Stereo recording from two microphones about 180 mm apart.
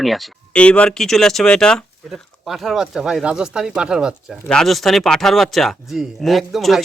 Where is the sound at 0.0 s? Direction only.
Centre (ahead or behind).